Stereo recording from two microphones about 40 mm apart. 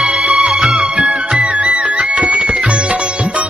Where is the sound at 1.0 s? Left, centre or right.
Right.